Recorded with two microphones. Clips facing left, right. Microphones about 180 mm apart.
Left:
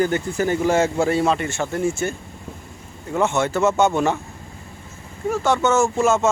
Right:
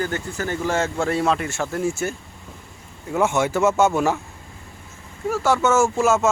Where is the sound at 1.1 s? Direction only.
Centre (ahead or behind).